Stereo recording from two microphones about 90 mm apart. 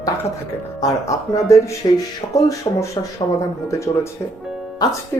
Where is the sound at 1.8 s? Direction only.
60° left (ahead or behind).